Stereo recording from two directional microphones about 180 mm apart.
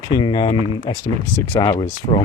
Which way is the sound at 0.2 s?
25° left (ahead or behind).